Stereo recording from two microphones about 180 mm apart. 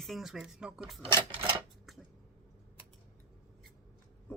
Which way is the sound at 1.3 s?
30° right (ahead or behind).